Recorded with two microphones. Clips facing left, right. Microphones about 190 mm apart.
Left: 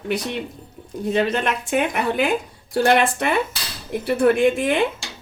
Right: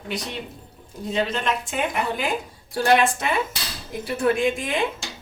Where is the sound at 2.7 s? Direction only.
60° left (ahead or behind).